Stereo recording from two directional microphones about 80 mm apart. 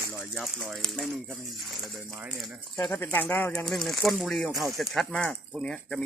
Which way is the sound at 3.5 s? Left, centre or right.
Centre.